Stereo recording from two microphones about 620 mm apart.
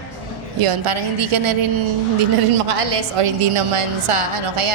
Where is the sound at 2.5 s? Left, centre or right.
Right.